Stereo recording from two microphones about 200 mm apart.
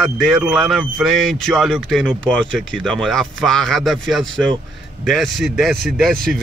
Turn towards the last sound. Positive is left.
turn(degrees=0)  # may be behind; listen again after turning